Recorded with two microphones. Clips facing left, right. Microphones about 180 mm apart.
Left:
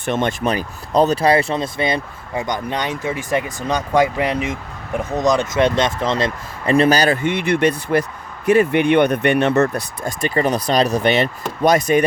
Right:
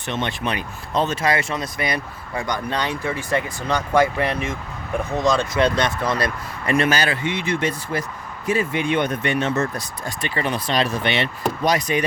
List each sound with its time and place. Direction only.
0.0 s speech: 45° left (ahead or behind)